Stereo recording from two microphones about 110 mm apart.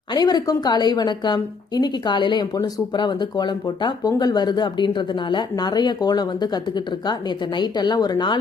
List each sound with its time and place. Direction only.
0.1 s a woman's voice: 40° left (ahead or behind)